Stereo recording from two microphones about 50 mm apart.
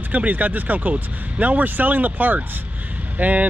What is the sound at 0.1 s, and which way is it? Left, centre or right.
Speech, right.